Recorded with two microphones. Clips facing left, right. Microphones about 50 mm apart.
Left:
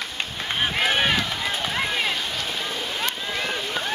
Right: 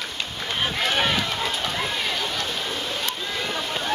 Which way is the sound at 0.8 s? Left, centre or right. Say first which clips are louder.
Left 1 dB; centre.